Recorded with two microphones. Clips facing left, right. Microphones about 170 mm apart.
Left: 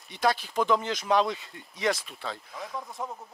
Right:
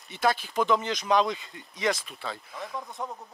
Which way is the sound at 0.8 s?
15° right (ahead or behind).